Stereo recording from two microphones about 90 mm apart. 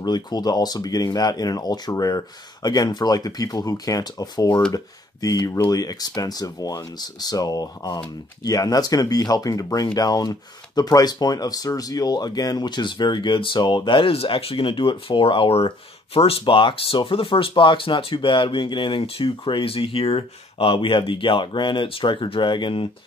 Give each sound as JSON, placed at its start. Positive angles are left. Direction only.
{"t": 0.0, "sound": "speech", "side_deg": 50}